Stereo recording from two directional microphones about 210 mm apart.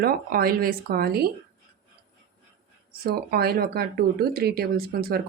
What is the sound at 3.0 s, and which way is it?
Speech, 50° right (ahead or behind).